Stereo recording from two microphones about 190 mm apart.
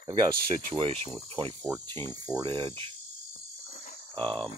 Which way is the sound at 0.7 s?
30° right (ahead or behind).